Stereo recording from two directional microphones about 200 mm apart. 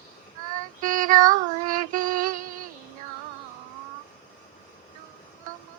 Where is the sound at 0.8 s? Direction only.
40° right (ahead or behind).